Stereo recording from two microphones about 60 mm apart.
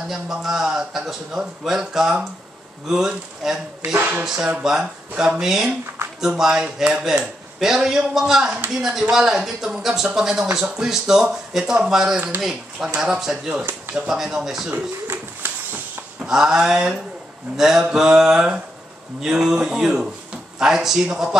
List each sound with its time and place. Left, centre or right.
0.1 s a man's voice: centre
3.9 s speech: right
4.2 s a man's voice: centre
14.7 s a sound: right
16.2 s a man's voice: centre